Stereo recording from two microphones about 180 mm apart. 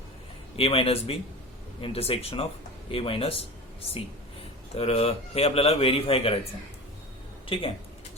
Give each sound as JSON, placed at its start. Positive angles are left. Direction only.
{"t": 0.5, "sound": "a man's voice", "side_deg": 30}
{"t": 4.7, "sound": "a man's voice", "side_deg": 35}
{"t": 7.4, "sound": "speech", "side_deg": 30}